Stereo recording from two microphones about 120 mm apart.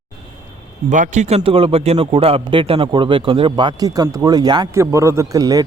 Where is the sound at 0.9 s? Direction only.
85° right; by 4.6 s 35° right (ahead or behind).